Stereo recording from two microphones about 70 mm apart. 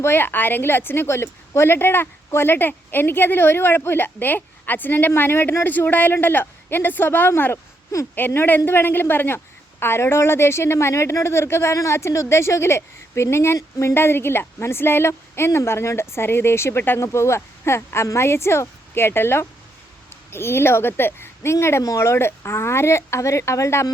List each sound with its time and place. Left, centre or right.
0.0 s a woman's voice: left
13.6 s speech: left
13.9 s a woman's voice: left